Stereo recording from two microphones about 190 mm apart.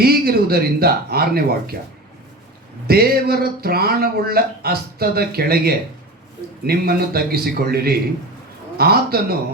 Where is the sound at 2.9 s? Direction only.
55° right (ahead or behind).